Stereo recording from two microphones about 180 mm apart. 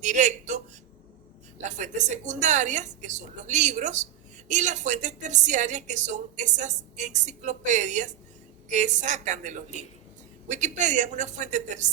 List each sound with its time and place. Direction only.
0.0 s a woman's voice: 40° right (ahead or behind)
1.6 s a woman's voice: 40° right (ahead or behind)